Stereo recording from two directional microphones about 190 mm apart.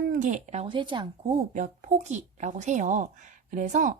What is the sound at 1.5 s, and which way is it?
A woman's voice, 40° right (ahead or behind).